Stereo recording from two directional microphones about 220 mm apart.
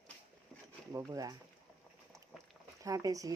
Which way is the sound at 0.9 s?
15° right (ahead or behind).